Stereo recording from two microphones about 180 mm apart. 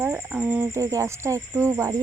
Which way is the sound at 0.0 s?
10° right (ahead or behind).